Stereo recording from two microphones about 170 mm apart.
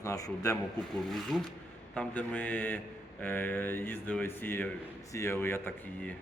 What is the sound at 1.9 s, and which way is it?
Speech, 10° left (ahead or behind).